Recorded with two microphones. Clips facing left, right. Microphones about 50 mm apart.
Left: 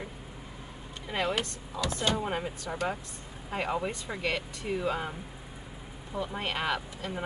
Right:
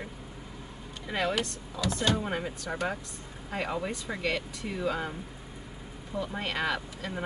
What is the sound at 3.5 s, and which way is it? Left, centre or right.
Speech, centre.